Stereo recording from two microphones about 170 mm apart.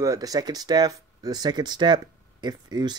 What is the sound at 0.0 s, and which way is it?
Speech, 20° right (ahead or behind).